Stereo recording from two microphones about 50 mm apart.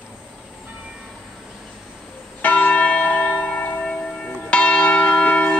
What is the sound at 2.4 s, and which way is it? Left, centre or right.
Church bell, left.